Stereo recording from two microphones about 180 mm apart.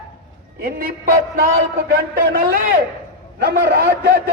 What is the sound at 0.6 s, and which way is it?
A man's voice, 55° right (ahead or behind).